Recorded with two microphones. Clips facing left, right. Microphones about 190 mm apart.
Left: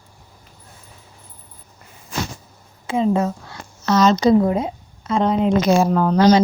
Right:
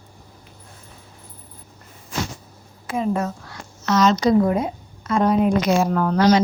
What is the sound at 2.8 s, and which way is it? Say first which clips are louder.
A woman's voice: left 4 dB; 25° left (ahead or behind).